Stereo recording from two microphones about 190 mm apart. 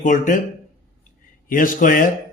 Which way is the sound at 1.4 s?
45° left (ahead or behind).